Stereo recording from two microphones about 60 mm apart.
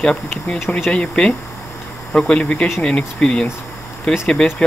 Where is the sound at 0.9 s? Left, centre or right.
Centre.